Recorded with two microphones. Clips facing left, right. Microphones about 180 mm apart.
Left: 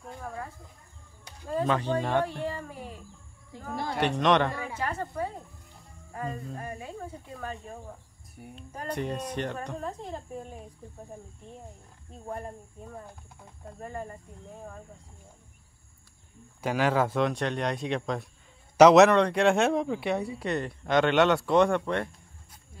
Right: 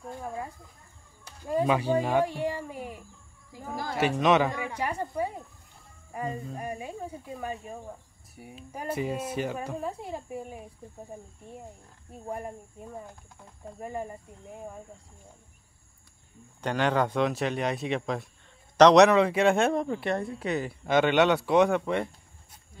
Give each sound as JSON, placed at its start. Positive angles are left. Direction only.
{"t": 0.2, "sound": "a sound", "side_deg": -15}
{"t": 1.5, "sound": "a child's voice", "side_deg": -10}
{"t": 3.9, "sound": "a child's voice", "side_deg": -5}
{"t": 12.1, "sound": "a child's voice", "side_deg": -10}
{"t": 16.6, "sound": "speech", "side_deg": 5}